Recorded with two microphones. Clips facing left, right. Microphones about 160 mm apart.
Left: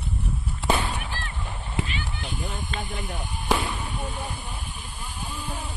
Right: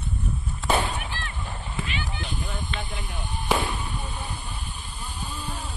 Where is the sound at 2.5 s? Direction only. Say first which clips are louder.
Even; 45° left (ahead or behind).